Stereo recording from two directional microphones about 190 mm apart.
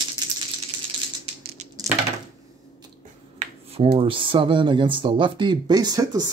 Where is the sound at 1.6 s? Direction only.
40° right (ahead or behind).